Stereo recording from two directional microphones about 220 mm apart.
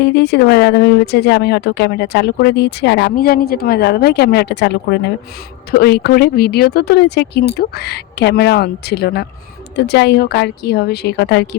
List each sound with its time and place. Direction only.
0.0 s speech: 50° left (ahead or behind)